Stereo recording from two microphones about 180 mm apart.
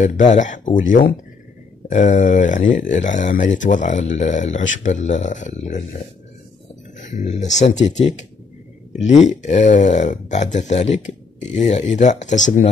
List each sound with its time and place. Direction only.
0.0 s speech: 40° left (ahead or behind)
7.0 s speech: 45° left (ahead or behind)
9.3 s speech: 40° left (ahead or behind)